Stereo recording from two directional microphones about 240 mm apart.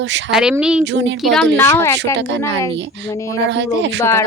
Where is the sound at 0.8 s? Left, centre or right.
Right.